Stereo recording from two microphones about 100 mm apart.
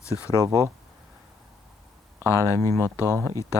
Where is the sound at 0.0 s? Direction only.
30° left (ahead or behind).